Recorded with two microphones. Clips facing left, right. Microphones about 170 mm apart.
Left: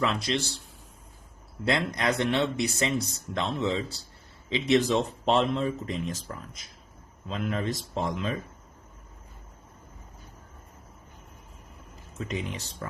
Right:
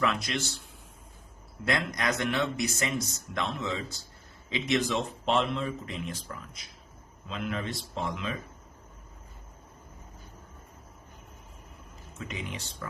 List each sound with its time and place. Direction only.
0.0 s speech: 30° left (ahead or behind)
1.6 s speech: 25° left (ahead or behind)
12.3 s speech: 35° left (ahead or behind)